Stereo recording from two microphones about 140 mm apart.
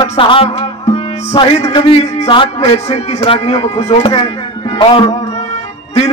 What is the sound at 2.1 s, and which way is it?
A man's voice, 40° left (ahead or behind).